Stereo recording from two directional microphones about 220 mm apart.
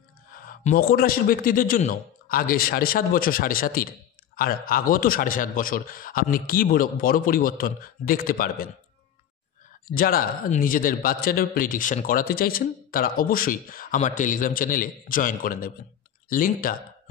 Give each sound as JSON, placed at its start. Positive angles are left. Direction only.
{"t": 0.3, "sound": "a man's voice", "side_deg": 40}
{"t": 9.8, "sound": "a man's voice", "side_deg": 40}